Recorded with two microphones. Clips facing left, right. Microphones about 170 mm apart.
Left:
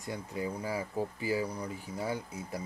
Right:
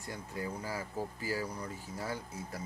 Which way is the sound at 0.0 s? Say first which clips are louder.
Left 4 dB; 15° left (ahead or behind).